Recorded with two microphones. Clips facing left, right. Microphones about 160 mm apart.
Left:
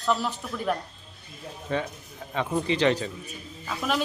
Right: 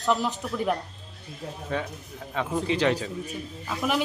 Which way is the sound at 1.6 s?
Centre (ahead or behind).